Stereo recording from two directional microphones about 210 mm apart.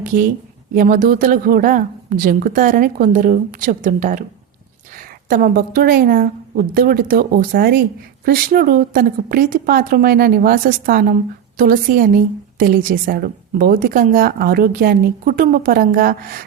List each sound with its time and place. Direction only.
0.0 s a woman's voice: 40° right (ahead or behind)